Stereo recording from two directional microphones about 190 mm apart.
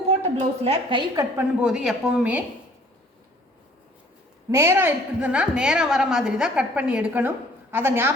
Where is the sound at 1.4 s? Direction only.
5° right (ahead or behind).